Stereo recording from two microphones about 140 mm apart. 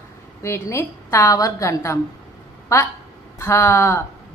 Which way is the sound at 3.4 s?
20° left (ahead or behind).